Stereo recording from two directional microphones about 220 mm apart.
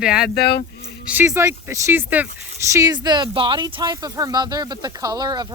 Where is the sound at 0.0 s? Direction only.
5° right (ahead or behind).